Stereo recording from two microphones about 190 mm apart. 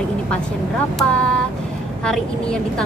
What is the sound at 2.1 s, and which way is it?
Speech, 5° left (ahead or behind).